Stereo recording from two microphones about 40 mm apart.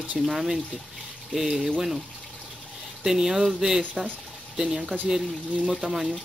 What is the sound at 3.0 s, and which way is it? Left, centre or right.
Speech, centre.